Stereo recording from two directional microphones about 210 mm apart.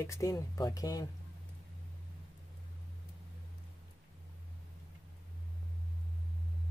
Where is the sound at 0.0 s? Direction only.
15° left (ahead or behind).